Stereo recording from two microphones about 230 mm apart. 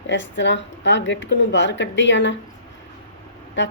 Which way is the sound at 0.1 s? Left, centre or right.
Left.